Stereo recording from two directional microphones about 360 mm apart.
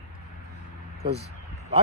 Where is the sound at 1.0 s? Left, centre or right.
Right.